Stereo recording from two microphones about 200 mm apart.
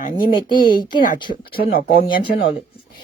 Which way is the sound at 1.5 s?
50° left (ahead or behind).